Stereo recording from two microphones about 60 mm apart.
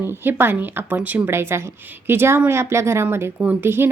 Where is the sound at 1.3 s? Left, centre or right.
Right.